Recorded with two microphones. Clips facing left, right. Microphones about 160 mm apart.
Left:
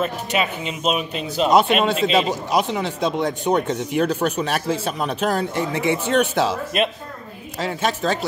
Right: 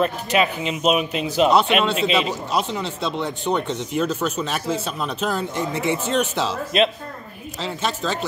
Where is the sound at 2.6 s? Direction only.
60° left (ahead or behind).